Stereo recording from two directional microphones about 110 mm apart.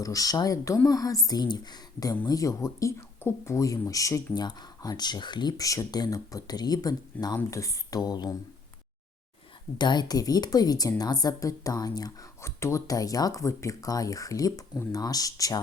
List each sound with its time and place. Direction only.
0.0 s speech: 30° left (ahead or behind)
9.7 s speech: 40° left (ahead or behind)
12.5 s speech: 25° left (ahead or behind)